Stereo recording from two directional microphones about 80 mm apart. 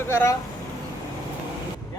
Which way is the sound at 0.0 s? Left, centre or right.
Left.